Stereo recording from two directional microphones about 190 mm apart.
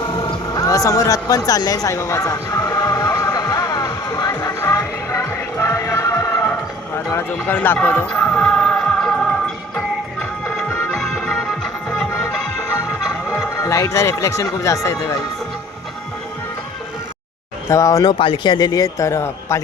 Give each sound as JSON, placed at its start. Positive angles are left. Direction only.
{"t": 0.3, "sound": "a sound", "side_deg": 20}
{"t": 7.1, "sound": "music", "side_deg": 10}
{"t": 10.7, "sound": "music", "side_deg": 5}
{"t": 13.6, "sound": "speech", "side_deg": 15}
{"t": 17.7, "sound": "speech", "side_deg": 15}